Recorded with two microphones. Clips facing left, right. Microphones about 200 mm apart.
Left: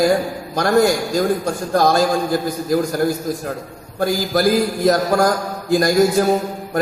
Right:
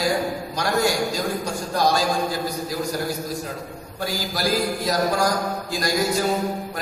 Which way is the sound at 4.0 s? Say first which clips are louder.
Left 9 dB; 50° left (ahead or behind).